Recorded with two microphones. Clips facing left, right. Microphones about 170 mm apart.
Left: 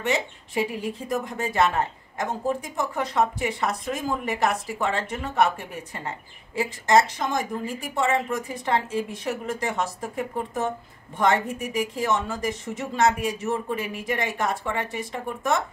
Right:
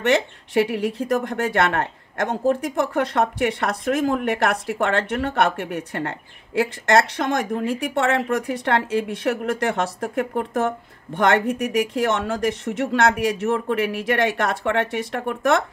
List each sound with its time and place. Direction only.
0.0 s speech: 75° right (ahead or behind)